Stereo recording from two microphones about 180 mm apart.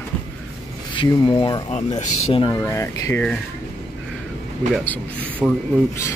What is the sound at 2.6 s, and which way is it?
Speech, 15° left (ahead or behind).